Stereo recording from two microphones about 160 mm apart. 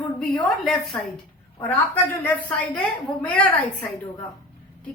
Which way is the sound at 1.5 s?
15° left (ahead or behind).